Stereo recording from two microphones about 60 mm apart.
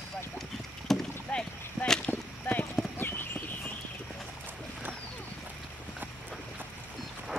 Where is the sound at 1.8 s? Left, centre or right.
Left.